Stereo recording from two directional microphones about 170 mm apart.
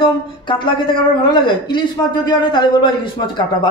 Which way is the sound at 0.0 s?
30° left (ahead or behind).